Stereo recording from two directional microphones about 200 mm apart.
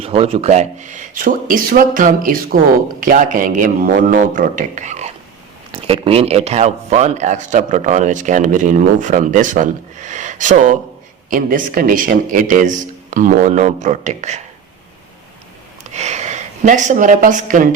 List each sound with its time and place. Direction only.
0.0 s speech: 30° right (ahead or behind)
16.0 s speech: 35° right (ahead or behind)